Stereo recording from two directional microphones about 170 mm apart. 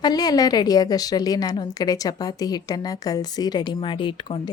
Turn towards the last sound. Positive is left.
turn(degrees=30)  # may be behind; listen again after turning